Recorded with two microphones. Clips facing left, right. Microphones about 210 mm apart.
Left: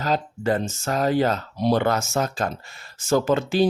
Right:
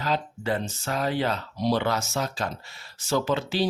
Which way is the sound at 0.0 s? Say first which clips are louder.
Left 4 dB; 45° left (ahead or behind).